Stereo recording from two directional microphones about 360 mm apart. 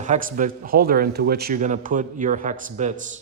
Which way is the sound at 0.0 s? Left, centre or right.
Right.